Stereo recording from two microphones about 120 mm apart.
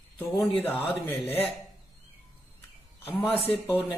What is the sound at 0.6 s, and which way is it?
Speech, 15° left (ahead or behind).